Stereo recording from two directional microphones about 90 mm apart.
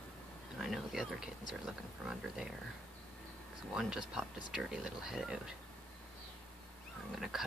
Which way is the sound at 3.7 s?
5° right (ahead or behind).